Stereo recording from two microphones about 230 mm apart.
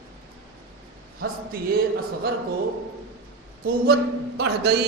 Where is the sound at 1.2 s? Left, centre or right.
Right.